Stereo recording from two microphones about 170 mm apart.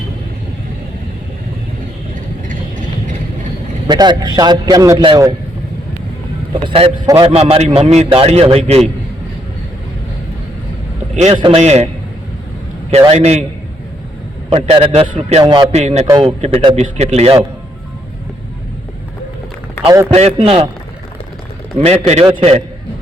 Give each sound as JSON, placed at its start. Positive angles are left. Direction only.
{"t": 2.5, "sound": "vehicle", "side_deg": -50}
{"t": 3.8, "sound": "a man's voice", "side_deg": -25}
{"t": 6.5, "sound": "a man's voice", "side_deg": -30}
{"t": 11.1, "sound": "a man's voice", "side_deg": -45}
{"t": 13.1, "sound": "a man's voice", "side_deg": -40}
{"t": 14.5, "sound": "a man's voice", "side_deg": -35}
{"t": 15.0, "sound": "a man's voice", "side_deg": -50}
{"t": 15.4, "sound": "a man's voice", "side_deg": -35}
{"t": 20.1, "sound": "a man's voice", "side_deg": -35}
{"t": 21.8, "sound": "a man's voice", "side_deg": -40}